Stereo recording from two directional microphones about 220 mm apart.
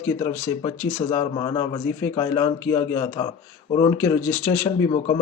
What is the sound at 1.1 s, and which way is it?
A man's voice, 20° left (ahead or behind).